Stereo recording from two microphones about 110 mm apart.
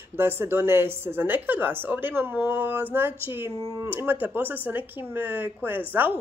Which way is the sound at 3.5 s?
35° right (ahead or behind).